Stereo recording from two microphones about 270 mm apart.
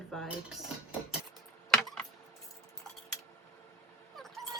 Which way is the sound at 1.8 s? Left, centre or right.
Centre.